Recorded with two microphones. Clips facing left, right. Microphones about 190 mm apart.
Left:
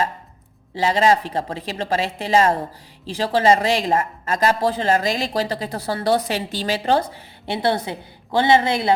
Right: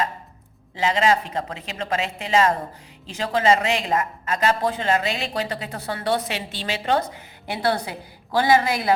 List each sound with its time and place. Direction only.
0.8 s a woman's voice: 35° left (ahead or behind)